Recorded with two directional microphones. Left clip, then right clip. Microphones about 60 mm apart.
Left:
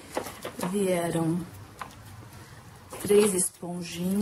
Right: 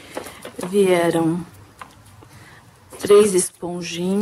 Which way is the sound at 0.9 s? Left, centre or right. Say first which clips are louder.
Right 11 dB; right.